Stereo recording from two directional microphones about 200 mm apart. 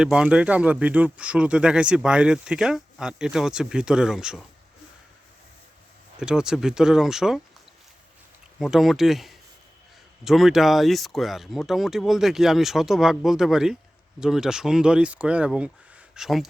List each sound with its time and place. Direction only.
0.0 s speech: 5° right (ahead or behind)
6.1 s speech: 5° right (ahead or behind)
8.5 s speech: centre (ahead or behind)